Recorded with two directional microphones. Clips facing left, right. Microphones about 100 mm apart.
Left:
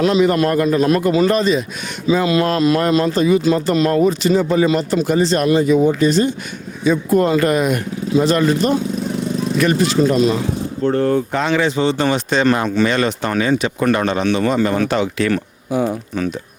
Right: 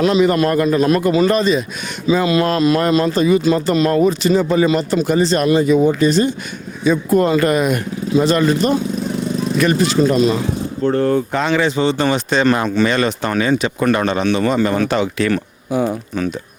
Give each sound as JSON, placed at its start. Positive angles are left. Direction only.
{"t": 0.0, "sound": "speech", "side_deg": -20}